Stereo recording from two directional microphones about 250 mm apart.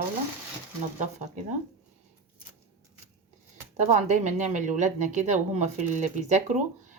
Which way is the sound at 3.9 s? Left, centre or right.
Right.